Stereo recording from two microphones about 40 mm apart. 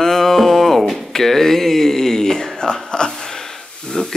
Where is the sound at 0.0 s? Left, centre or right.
Centre.